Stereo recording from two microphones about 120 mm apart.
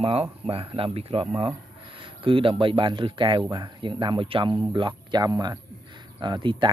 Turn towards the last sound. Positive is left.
turn(degrees=-40)  # may be behind; listen again after turning